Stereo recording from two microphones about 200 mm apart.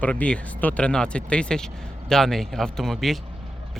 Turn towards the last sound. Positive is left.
turn(degrees=0)  # may be behind; listen again after turning